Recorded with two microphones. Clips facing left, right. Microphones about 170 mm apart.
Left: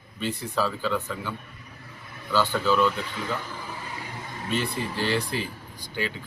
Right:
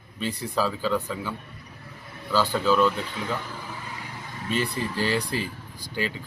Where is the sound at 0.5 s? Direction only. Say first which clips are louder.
Right 2 dB; 5° right (ahead or behind).